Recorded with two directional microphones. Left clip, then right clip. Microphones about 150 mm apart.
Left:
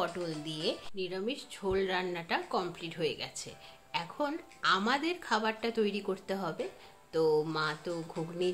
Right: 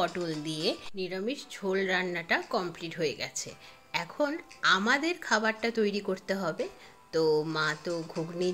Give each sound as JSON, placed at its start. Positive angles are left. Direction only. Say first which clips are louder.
{"t": 0.1, "sound": "speech", "louder": "right 4 dB", "side_deg": -25}